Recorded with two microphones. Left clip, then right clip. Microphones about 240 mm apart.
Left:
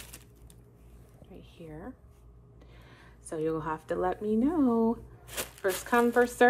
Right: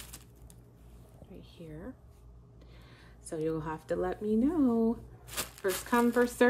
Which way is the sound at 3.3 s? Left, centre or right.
Centre.